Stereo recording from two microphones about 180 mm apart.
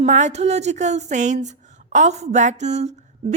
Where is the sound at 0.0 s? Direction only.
40° right (ahead or behind).